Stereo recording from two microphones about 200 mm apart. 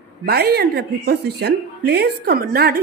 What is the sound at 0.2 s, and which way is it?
A woman's voice, 50° right (ahead or behind).